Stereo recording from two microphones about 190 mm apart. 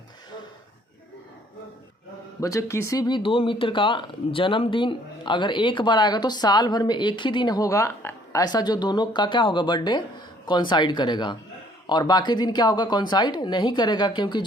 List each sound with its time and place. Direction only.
2.4 s speech: 15° left (ahead or behind)